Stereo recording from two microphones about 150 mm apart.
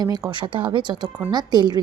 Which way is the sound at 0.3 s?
35° right (ahead or behind).